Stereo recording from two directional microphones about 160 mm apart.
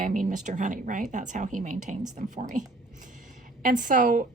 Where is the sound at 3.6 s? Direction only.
55° right (ahead or behind).